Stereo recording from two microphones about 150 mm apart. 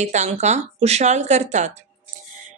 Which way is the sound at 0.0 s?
50° right (ahead or behind).